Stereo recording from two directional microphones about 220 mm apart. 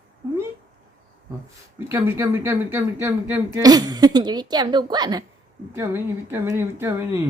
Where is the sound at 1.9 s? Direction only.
10° right (ahead or behind).